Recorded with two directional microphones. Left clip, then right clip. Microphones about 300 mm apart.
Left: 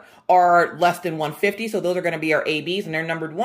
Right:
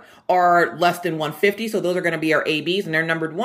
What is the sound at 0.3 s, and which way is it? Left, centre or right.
Speech, centre.